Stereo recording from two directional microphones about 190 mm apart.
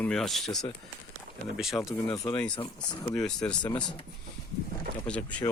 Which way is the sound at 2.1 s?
15° left (ahead or behind).